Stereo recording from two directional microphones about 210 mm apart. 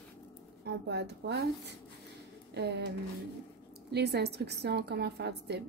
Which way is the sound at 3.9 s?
50° right (ahead or behind).